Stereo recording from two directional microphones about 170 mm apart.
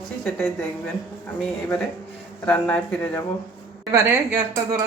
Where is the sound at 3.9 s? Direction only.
15° right (ahead or behind).